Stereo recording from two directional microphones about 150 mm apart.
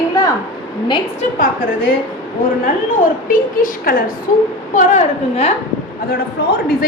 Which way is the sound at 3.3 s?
70° left (ahead or behind).